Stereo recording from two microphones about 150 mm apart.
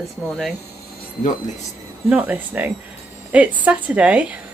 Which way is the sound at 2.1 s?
10° right (ahead or behind).